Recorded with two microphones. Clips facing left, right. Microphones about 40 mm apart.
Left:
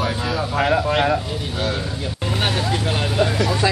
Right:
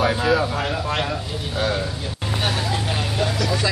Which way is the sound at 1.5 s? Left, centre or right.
Centre.